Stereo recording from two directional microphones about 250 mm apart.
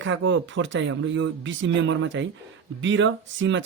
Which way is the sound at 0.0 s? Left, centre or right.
Right.